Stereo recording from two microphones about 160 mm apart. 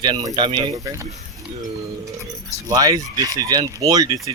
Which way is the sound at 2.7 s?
20° right (ahead or behind).